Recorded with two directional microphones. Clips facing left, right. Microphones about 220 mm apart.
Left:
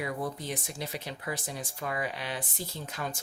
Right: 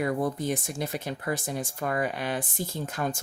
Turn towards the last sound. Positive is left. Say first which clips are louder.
# right 6 dB
turn(degrees=-50)  # may be behind; listen again after turning